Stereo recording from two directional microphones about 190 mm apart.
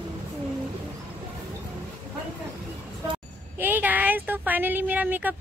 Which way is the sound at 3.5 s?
10° right (ahead or behind).